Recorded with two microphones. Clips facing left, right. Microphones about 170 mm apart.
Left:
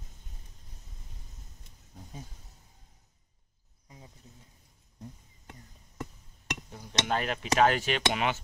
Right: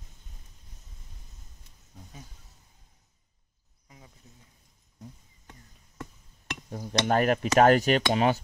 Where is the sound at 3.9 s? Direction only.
25° left (ahead or behind).